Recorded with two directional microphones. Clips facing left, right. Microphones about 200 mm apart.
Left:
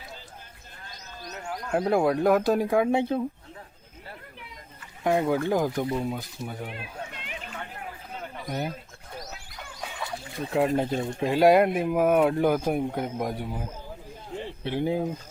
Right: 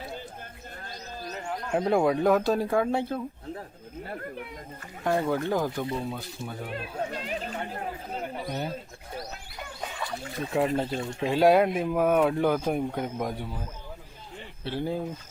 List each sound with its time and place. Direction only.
1.3 s speech: 5° left (ahead or behind)
4.1 s speech: 50° right (ahead or behind)
5.0 s speech: 10° left (ahead or behind)
6.7 s children playing: 35° right (ahead or behind)
10.0 s a sound: 5° left (ahead or behind)
11.0 s speech: 10° left (ahead or behind)